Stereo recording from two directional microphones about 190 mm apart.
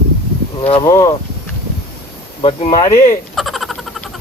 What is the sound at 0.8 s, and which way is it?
Speech, 20° left (ahead or behind).